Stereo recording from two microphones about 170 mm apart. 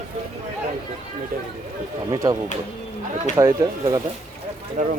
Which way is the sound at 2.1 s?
20° right (ahead or behind).